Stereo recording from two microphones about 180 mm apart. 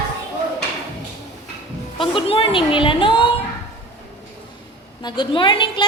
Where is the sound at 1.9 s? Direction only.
30° left (ahead or behind).